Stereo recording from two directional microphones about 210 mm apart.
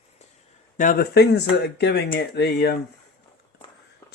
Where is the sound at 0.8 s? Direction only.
45° left (ahead or behind).